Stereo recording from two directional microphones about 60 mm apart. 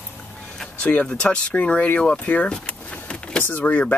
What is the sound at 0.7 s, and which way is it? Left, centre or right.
Speech, left.